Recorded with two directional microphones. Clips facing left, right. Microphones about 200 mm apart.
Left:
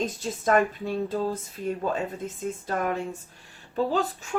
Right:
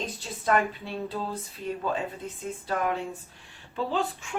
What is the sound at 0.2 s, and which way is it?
Speech, 45° left (ahead or behind).